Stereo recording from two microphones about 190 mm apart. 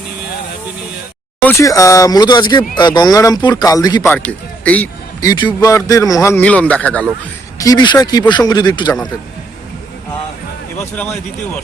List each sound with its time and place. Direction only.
1.5 s speech: 15° left (ahead or behind)
4.1 s speech: 5° left (ahead or behind)
5.3 s a man's voice: 20° left (ahead or behind); by 7.1 s 5° left (ahead or behind)
7.6 s speech: 20° left (ahead or behind)
10.9 s a man's voice: 10° left (ahead or behind)